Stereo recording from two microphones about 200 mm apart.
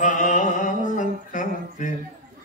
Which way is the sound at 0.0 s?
40° left (ahead or behind).